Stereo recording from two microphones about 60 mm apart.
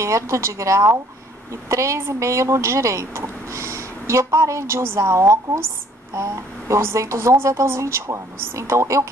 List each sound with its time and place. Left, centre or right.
0.0 s speech: right